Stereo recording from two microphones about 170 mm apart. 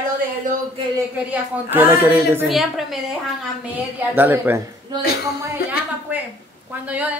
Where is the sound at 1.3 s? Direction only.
10° right (ahead or behind).